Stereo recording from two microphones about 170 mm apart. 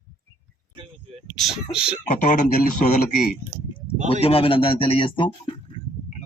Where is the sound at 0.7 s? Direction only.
35° right (ahead or behind).